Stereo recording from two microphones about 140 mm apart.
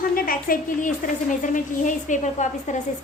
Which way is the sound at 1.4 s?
65° left (ahead or behind).